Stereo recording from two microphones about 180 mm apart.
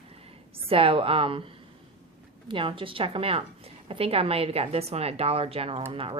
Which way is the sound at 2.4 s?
30° right (ahead or behind).